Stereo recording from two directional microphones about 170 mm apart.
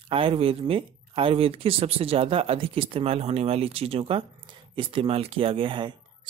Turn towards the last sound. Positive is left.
turn(degrees=-30)  # may be behind; listen again after turning